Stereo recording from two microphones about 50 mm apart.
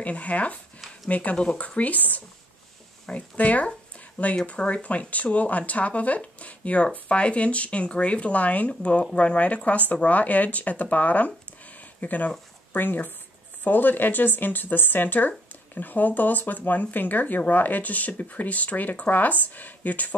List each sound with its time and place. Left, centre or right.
0.0 s speech: left